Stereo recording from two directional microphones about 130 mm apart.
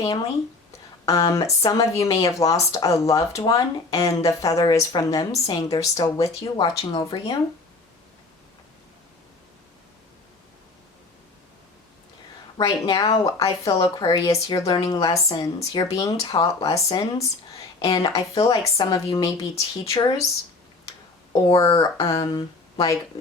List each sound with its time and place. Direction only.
1.0 s speech: 25° left (ahead or behind)
12.5 s a woman's voice: 30° left (ahead or behind)
21.3 s speech: 25° left (ahead or behind)